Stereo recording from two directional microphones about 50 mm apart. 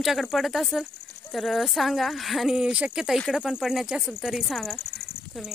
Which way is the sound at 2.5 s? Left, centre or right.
Centre.